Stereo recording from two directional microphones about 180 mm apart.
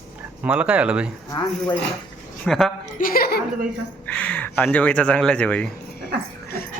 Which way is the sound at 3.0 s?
55° left (ahead or behind).